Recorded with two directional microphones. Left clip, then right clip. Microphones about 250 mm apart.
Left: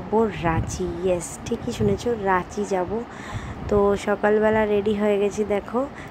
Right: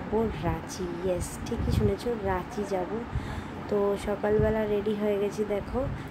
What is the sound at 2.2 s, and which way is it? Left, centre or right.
A woman's voice, centre.